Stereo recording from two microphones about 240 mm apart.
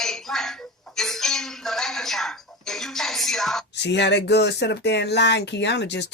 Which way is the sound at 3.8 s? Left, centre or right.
Left.